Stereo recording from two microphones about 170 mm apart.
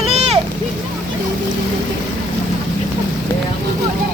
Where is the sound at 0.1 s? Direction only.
35° right (ahead or behind).